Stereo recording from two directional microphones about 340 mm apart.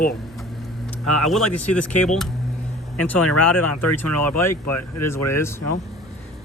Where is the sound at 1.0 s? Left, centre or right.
Left.